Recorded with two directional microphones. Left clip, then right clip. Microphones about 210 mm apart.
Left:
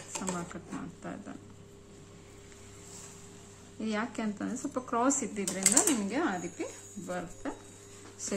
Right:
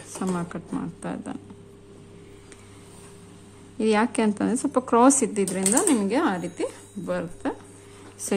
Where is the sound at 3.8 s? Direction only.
45° right (ahead or behind).